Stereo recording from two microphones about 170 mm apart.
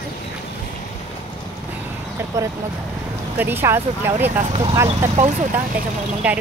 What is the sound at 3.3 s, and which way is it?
Speech, 10° right (ahead or behind).